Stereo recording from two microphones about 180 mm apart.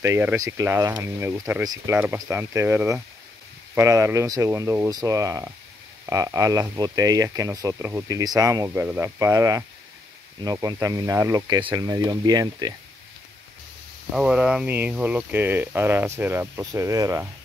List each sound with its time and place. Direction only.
0.0 s speech: 15° right (ahead or behind)
14.1 s speech: 5° right (ahead or behind)